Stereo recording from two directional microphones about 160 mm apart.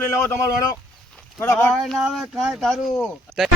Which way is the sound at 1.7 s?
Centre (ahead or behind).